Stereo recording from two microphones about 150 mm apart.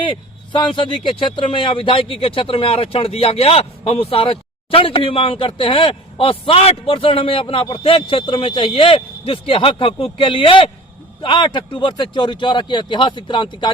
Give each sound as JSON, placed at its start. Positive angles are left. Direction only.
{"t": 0.5, "sound": "speech", "side_deg": 30}